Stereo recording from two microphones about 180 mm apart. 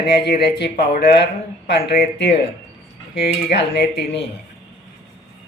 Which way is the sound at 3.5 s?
70° left (ahead or behind).